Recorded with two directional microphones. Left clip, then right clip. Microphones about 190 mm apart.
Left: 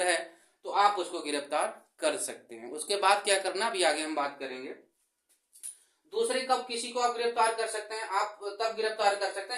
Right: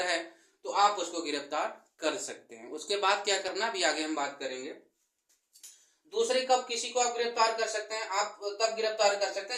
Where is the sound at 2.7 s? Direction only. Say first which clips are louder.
Left 2 dB; 35° left (ahead or behind).